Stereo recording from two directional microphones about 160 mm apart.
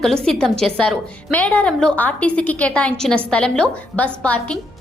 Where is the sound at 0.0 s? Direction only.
5° left (ahead or behind).